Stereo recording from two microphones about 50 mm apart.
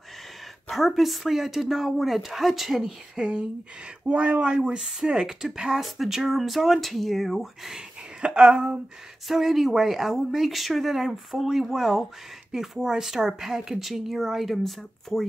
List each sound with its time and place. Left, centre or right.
0.7 s speech: centre
2.8 s speech: centre
7.7 s speech: centre
9.3 s speech: centre